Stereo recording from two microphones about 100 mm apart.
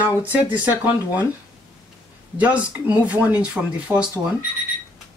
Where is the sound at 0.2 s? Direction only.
15° right (ahead or behind).